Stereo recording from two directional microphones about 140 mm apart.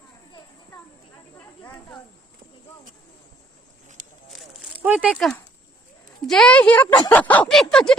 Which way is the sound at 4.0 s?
60° right (ahead or behind).